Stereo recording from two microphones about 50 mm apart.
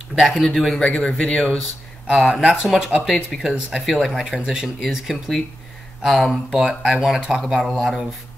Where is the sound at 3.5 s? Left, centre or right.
Centre.